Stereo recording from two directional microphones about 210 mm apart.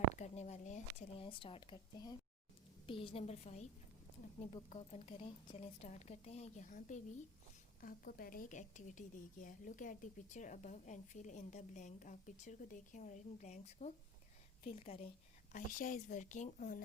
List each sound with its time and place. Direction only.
0.1 s a sound: 35° left (ahead or behind)
2.8 s a woman's voice: 25° left (ahead or behind)
15.5 s a woman's voice: 40° left (ahead or behind)